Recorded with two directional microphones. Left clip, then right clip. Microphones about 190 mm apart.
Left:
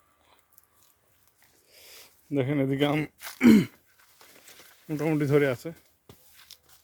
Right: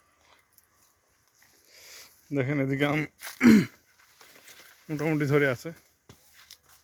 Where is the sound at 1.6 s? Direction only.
15° left (ahead or behind).